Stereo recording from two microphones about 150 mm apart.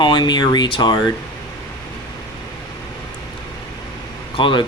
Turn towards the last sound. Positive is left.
turn(degrees=35)  # may be behind; listen again after turning